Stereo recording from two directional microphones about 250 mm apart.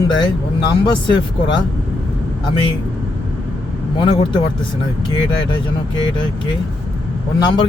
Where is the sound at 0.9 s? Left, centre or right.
Centre.